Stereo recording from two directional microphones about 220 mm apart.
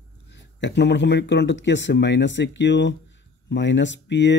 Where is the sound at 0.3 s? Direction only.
50° left (ahead or behind).